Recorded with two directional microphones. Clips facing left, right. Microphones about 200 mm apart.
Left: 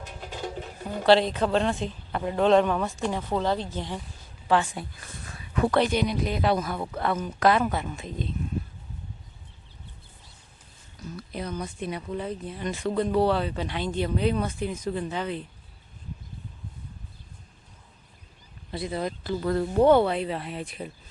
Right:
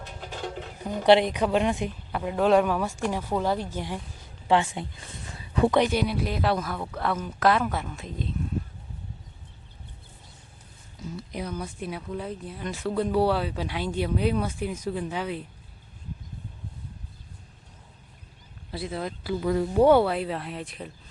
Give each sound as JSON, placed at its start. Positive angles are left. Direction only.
{"t": 0.0, "sound": "music", "side_deg": 0}
{"t": 0.8, "sound": "a woman's voice", "side_deg": -15}
{"t": 4.4, "sound": "a woman's voice", "side_deg": -20}
{"t": 11.0, "sound": "speech", "side_deg": -20}
{"t": 18.7, "sound": "speech", "side_deg": 0}